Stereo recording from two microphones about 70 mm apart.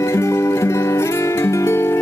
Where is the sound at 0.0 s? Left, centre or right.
Left.